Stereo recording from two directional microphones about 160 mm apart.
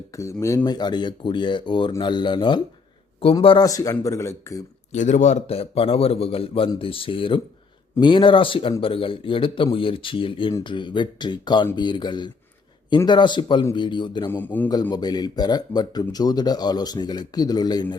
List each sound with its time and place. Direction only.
0.1 s speech: 20° left (ahead or behind)
4.9 s a man's voice: 50° left (ahead or behind); by 14.3 s 30° left (ahead or behind)
14.3 s a man's voice: 10° left (ahead or behind)
14.7 s speech: 25° left (ahead or behind)